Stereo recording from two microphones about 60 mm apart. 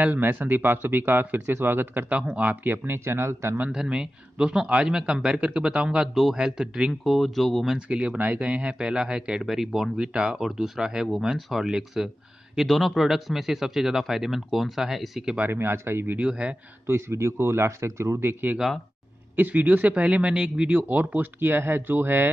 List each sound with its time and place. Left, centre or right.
0.0 s speech: right
3.7 s a man's voice: centre
7.7 s a man's voice: centre
9.4 s a man's voice: centre
15.5 s speech: right
16.2 s speech: centre
16.8 s speech: right
18.2 s speech: right